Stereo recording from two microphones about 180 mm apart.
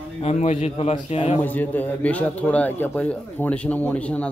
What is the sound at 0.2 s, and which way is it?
A man's voice, 35° left (ahead or behind).